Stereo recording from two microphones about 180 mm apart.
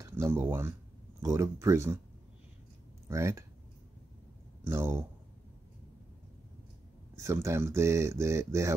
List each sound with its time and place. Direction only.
0.0 s speech: 15° right (ahead or behind)
3.1 s speech: 15° right (ahead or behind)
4.6 s speech: 15° right (ahead or behind)
7.2 s speech: 15° right (ahead or behind)